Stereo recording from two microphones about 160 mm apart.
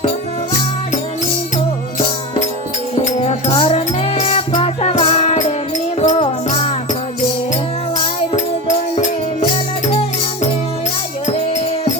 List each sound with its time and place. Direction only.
2.0 s music: 40° left (ahead or behind)
8.6 s music: 50° left (ahead or behind)